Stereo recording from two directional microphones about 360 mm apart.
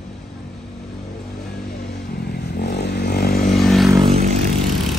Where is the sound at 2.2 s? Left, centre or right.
Left.